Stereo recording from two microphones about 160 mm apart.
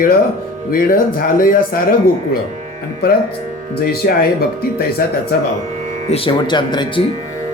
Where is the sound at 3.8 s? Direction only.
75° left (ahead or behind).